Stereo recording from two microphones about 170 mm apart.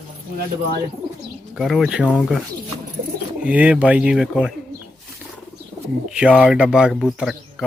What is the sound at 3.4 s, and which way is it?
Speech, 10° right (ahead or behind).